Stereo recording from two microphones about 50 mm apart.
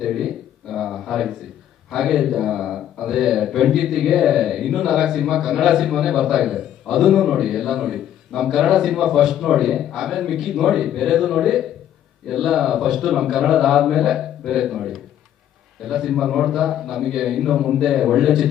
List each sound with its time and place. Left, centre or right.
0.0 s a man's voice: centre